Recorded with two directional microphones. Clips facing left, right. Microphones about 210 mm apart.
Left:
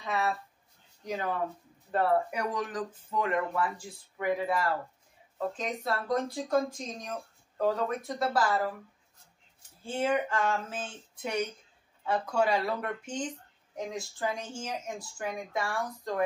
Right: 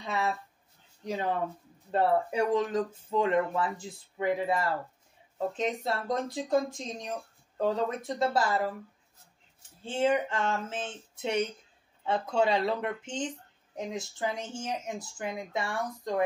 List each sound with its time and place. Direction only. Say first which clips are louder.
0.0 s a sound: even; 25° right (ahead or behind)
1.0 s speech: right 1 dB; 25° right (ahead or behind)
9.8 s speech: right 2 dB; 20° right (ahead or behind)